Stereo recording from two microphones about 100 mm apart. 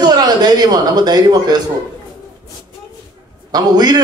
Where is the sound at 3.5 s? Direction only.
45° right (ahead or behind).